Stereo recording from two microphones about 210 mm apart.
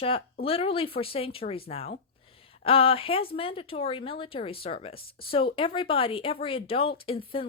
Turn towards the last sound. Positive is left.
turn(degrees=25)  # may be behind; listen again after turning